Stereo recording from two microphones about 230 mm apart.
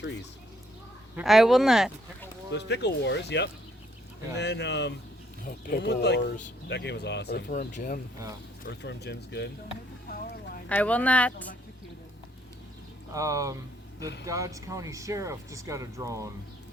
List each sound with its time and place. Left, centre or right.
1.1 s speech: centre
2.5 s speech: left
8.6 s speech: left
10.7 s speech: centre
13.1 s speech: centre